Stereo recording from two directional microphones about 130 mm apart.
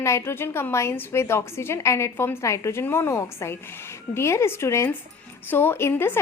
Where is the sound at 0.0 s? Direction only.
20° left (ahead or behind).